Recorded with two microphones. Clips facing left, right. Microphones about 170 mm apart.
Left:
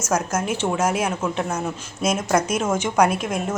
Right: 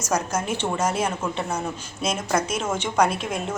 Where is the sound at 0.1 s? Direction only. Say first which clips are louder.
Left 2 dB; 5° left (ahead or behind).